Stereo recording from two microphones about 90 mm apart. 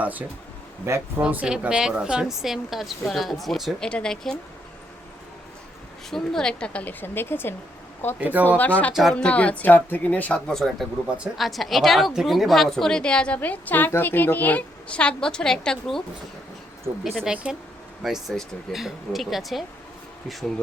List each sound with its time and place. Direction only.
0.0 s a woman's voice: 20° right (ahead or behind)
0.9 s speech: 30° right (ahead or behind)
1.2 s a woman's voice: 15° right (ahead or behind)
3.8 s a woman's voice: 10° left (ahead or behind)
6.1 s a woman's voice: 5° left (ahead or behind)
7.0 s speech: 25° left (ahead or behind)
8.2 s speech: 20° right (ahead or behind)
8.5 s a woman's voice: 15° left (ahead or behind)
8.9 s speech: 5° right (ahead or behind)
9.1 s a woman's voice: 15° left (ahead or behind)
10.5 s a woman's voice: 5° left (ahead or behind)
17.3 s a woman's voice: 10° right (ahead or behind)
18.0 s speech: centre (ahead or behind)